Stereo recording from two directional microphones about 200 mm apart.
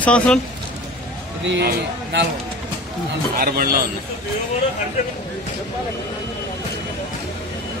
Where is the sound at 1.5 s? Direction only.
55° right (ahead or behind).